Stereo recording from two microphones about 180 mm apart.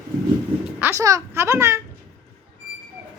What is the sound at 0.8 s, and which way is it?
Speech, 15° right (ahead or behind).